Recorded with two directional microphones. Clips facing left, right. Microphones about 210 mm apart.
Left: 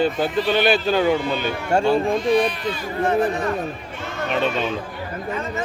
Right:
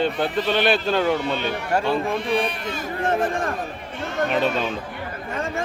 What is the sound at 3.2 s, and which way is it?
Speech, 50° right (ahead or behind).